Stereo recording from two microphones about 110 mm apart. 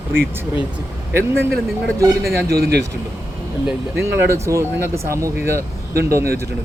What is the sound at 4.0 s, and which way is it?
Speech, 25° right (ahead or behind).